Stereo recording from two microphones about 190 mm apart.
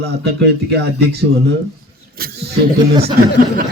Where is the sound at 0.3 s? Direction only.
60° right (ahead or behind).